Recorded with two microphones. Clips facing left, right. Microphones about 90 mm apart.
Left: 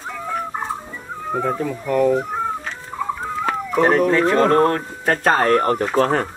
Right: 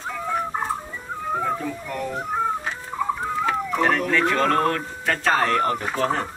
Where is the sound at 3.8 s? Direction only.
35° left (ahead or behind).